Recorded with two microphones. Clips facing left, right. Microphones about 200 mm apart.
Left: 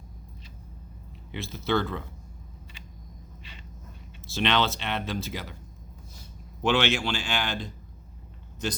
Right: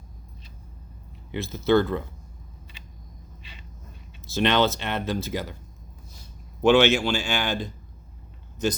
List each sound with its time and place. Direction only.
1.6 s speech: 45° right (ahead or behind)
4.4 s speech: 45° right (ahead or behind)
6.6 s speech: 50° right (ahead or behind)